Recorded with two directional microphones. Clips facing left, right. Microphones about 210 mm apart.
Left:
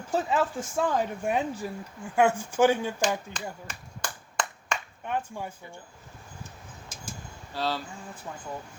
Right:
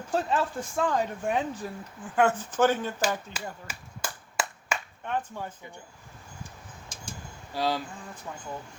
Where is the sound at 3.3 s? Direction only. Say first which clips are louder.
Left 1 dB; 5° right (ahead or behind).